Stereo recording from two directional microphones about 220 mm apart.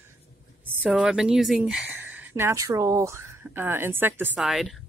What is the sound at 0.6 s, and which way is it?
Speech, 5° right (ahead or behind).